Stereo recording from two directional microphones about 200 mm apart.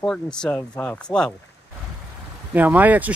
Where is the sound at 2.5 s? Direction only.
10° right (ahead or behind).